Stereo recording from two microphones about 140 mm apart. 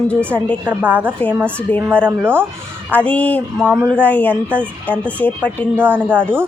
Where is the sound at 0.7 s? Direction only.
10° right (ahead or behind).